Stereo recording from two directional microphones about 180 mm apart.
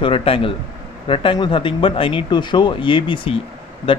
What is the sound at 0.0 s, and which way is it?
Speech, 30° left (ahead or behind).